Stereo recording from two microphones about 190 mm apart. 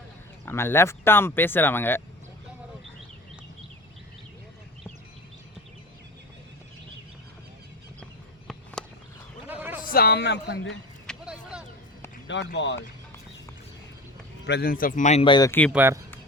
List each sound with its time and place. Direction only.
0.4 s speech: 15° left (ahead or behind)
8.8 s a sound: 5° left (ahead or behind)
9.5 s a sound: 10° right (ahead or behind)
9.8 s a man's voice: 55° left (ahead or behind); by 10.8 s 70° left (ahead or behind)
11.0 s a sound: centre (ahead or behind)
12.5 s speech: 70° left (ahead or behind)
14.4 s a man's voice: 55° left (ahead or behind); by 15.2 s 40° left (ahead or behind)
15.2 s speech: 20° left (ahead or behind)
15.7 s speech: 10° right (ahead or behind)